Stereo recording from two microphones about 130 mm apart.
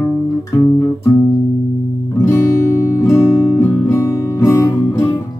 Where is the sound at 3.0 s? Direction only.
20° left (ahead or behind).